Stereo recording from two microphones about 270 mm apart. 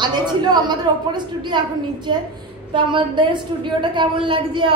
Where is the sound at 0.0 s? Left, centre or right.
Centre.